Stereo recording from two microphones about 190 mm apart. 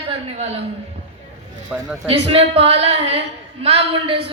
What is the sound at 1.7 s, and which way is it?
Speech, 5° right (ahead or behind).